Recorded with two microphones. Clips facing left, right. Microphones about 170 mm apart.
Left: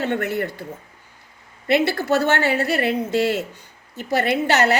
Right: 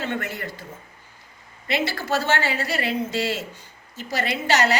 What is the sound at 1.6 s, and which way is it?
A woman's voice, 60° left (ahead or behind).